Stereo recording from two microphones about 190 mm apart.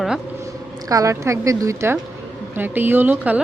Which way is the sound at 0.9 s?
15° right (ahead or behind).